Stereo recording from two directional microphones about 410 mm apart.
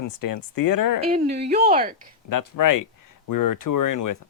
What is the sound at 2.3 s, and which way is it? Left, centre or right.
Speech, left.